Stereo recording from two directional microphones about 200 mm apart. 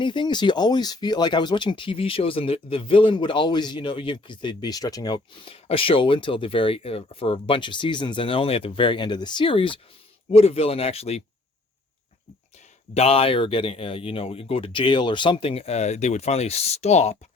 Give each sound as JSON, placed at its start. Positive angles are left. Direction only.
{"t": 0.0, "sound": "speech", "side_deg": 25}
{"t": 12.9, "sound": "speech", "side_deg": 30}